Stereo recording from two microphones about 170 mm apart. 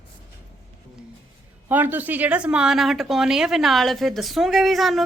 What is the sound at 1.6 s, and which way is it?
Speech, 10° right (ahead or behind).